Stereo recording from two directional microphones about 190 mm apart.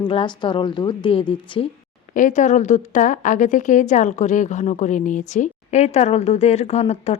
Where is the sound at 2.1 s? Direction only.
40° left (ahead or behind).